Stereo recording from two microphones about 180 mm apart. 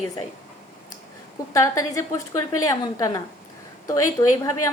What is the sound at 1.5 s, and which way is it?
A woman's voice, 20° left (ahead or behind).